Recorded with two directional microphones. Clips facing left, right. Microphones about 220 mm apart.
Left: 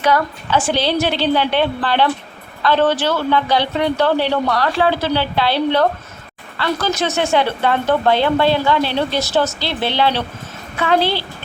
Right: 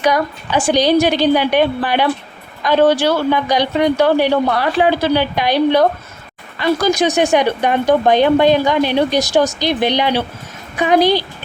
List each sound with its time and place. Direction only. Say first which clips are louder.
0.0 s speech: right 1 dB; 15° right (ahead or behind)